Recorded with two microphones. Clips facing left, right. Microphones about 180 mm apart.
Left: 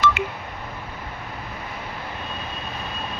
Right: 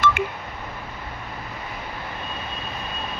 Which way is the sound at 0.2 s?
55° right (ahead or behind).